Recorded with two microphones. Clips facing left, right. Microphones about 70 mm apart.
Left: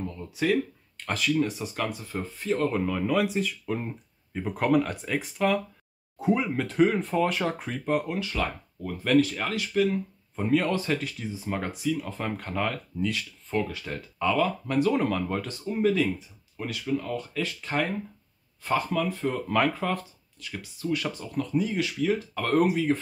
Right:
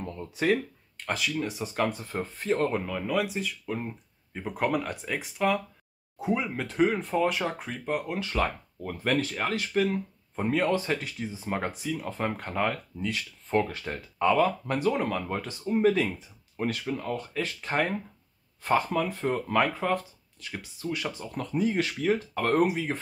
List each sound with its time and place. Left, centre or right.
0.0 s a sound: right
0.9 s speech: centre
1.5 s speech: right
2.8 s speech: centre
8.2 s speech: right
13.5 s speech: right
14.9 s speech: centre; by 19.4 s right
19.5 s speech: centre
20.3 s speech: right
21.4 s speech: right
22.6 s speech: centre